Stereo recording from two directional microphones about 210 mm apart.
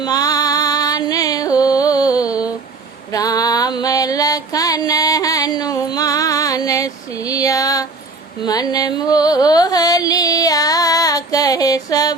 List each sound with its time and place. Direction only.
0.0 s music: 20° left (ahead or behind)